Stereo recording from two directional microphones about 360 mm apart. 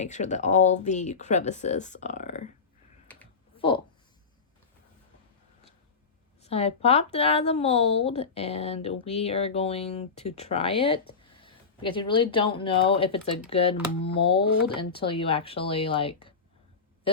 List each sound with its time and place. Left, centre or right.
0.0 s speech: centre
6.4 s speech: centre